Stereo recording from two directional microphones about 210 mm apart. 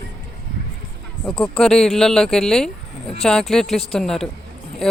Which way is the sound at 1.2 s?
5° left (ahead or behind).